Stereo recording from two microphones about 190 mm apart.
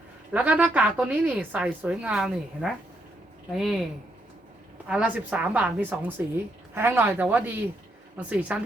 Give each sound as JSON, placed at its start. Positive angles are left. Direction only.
{"t": 0.3, "sound": "a woman's voice", "side_deg": -5}
{"t": 4.9, "sound": "a woman's voice", "side_deg": -5}